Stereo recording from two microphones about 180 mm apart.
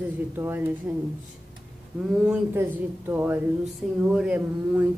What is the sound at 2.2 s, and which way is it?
Speech, 10° right (ahead or behind).